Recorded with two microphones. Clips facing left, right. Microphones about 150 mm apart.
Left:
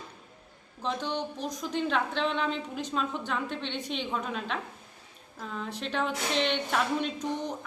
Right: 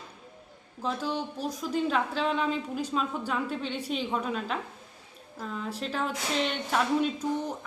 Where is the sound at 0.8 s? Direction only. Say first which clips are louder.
Right 1 dB; 5° right (ahead or behind).